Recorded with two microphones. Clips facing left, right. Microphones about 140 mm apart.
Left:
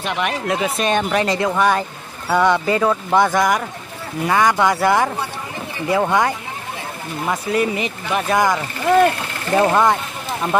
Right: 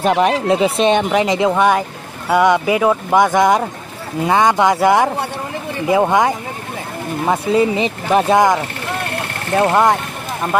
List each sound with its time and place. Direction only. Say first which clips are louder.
0.0 s speech: right 8 dB; 35° right (ahead or behind)
8.3 s speech: right 3 dB; 20° right (ahead or behind)
9.7 s speech: right 3 dB; 15° right (ahead or behind)